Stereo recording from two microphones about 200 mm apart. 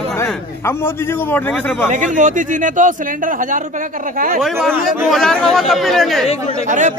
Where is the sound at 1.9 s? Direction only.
40° right (ahead or behind).